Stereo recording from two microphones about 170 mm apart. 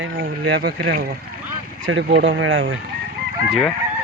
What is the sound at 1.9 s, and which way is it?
Speech, 80° right.